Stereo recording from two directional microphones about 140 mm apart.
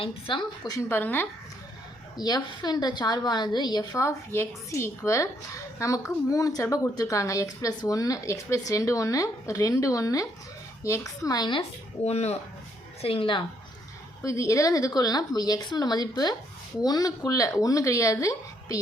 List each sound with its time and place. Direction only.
0.0 s a woman's voice: 35° left (ahead or behind)
0.8 s speech: 15° left (ahead or behind)
2.1 s a woman's voice: 30° left (ahead or behind)
12.0 s a woman's voice: 50° left (ahead or behind)
14.3 s a woman's voice: 20° left (ahead or behind)